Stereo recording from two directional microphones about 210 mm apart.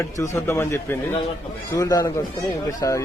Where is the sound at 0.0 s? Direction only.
15° left (ahead or behind).